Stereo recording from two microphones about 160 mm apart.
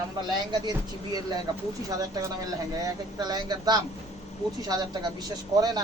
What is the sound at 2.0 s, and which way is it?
Speech, 20° right (ahead or behind).